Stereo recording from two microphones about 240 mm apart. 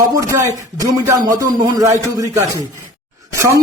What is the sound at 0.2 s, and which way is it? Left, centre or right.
A man's voice, centre.